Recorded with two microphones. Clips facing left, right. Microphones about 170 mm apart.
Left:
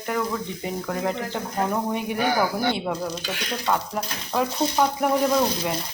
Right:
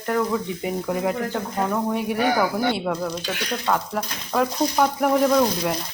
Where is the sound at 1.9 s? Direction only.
Centre (ahead or behind).